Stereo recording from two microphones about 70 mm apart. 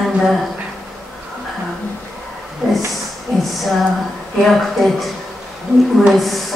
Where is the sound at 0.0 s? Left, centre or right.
Centre.